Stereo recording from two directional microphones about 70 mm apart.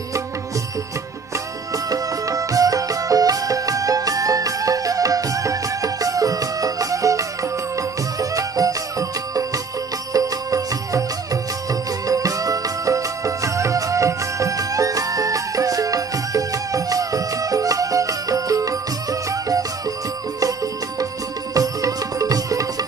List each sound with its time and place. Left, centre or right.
1.7 s music: right
12.1 s music: right
21.5 s music: right